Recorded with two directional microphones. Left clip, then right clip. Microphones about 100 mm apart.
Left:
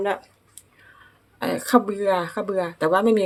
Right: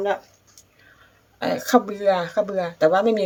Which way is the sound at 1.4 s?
40° left (ahead or behind).